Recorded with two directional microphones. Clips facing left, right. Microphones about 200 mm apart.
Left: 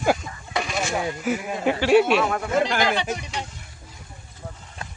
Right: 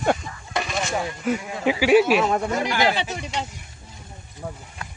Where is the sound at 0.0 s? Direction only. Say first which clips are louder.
Even; centre (ahead or behind).